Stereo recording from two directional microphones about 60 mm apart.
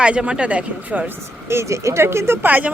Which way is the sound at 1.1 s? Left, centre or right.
Right.